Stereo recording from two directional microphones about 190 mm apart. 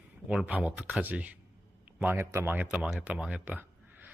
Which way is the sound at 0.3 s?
5° right (ahead or behind).